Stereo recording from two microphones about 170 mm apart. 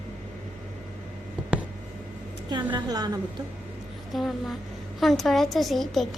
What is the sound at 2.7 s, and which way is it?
Speech, 25° right (ahead or behind).